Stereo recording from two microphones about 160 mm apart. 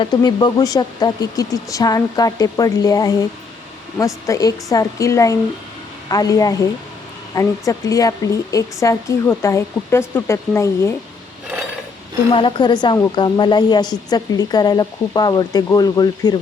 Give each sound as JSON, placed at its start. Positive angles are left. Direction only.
{"t": 0.0, "sound": "a woman's voice", "side_deg": 25}
{"t": 12.3, "sound": "a woman's voice", "side_deg": 30}